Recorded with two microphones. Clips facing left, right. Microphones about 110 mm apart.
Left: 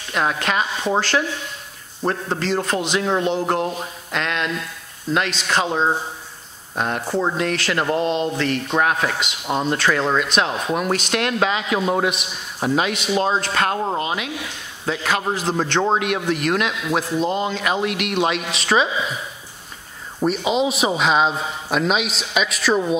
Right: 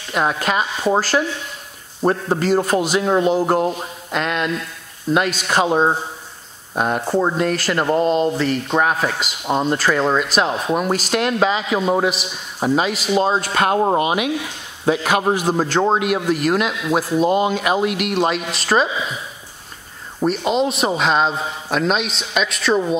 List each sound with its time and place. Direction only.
0.1 s a man's voice: 5° right (ahead or behind)
8.0 s speech: 40° right (ahead or behind)
8.8 s a man's voice: centre (ahead or behind)
20.2 s a man's voice: centre (ahead or behind)